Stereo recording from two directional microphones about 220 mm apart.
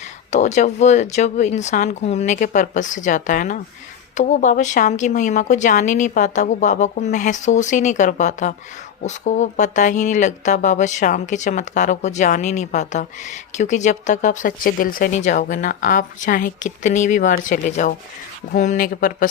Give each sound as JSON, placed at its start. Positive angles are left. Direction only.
{"t": 0.3, "sound": "speech", "side_deg": 30}